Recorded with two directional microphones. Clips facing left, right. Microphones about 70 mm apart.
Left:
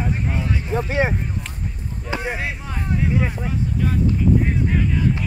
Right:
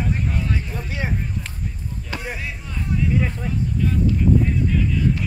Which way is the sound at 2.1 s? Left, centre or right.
Left.